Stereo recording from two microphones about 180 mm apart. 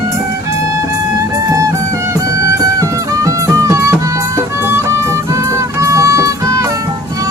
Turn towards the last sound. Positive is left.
turn(degrees=-15)  # may be behind; listen again after turning